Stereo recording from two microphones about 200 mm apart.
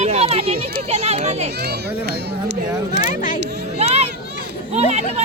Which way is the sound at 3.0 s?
40° left (ahead or behind).